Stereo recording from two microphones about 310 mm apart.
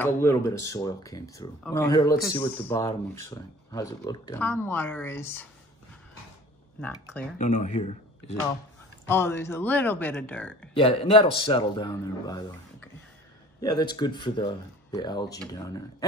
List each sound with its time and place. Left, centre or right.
0.0 s speech: centre
6.8 s speech: centre
7.3 s speech: left
9.0 s speech: centre
10.7 s speech: centre